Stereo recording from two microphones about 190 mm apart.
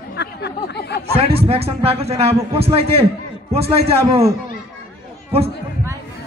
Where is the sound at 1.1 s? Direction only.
30° right (ahead or behind).